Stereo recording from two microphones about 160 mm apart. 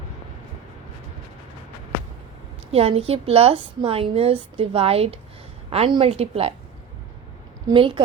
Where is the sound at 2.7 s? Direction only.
40° right (ahead or behind).